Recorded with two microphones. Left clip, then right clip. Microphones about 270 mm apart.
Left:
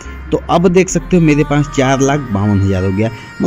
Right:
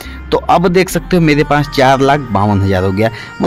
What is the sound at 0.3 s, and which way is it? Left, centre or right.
Speech, right.